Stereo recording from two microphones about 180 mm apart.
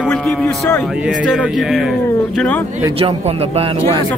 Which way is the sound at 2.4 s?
10° left (ahead or behind).